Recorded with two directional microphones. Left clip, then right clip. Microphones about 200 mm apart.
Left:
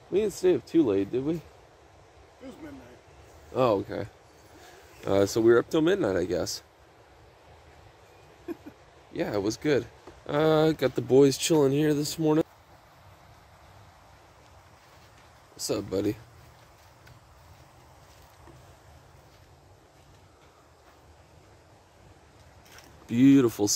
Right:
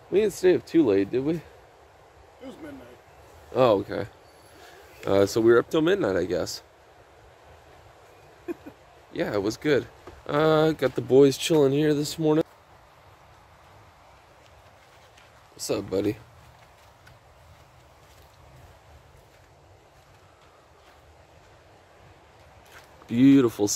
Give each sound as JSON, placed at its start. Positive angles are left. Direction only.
{"t": 0.1, "sound": "speech", "side_deg": -10}
{"t": 3.5, "sound": "speech", "side_deg": -10}
{"t": 8.5, "sound": "a sound", "side_deg": -15}
{"t": 9.1, "sound": "speech", "side_deg": 5}
{"t": 15.5, "sound": "speech", "side_deg": 5}
{"t": 23.0, "sound": "a sound", "side_deg": 5}